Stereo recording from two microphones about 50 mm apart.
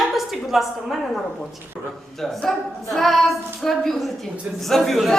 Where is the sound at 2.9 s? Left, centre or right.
Centre.